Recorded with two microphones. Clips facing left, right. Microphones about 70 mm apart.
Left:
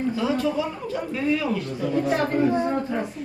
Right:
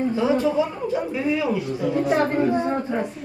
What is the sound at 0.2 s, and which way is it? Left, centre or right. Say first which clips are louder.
Speech: right 5 dB; right.